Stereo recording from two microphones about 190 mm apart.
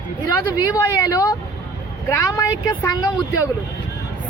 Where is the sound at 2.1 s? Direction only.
15° left (ahead or behind).